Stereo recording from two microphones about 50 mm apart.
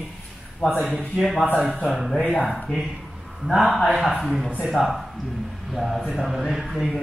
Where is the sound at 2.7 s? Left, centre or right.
Centre.